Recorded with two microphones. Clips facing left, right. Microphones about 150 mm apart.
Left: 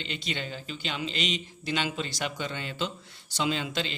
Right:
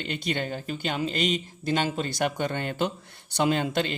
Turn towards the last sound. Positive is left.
turn(degrees=-55)  # may be behind; listen again after turning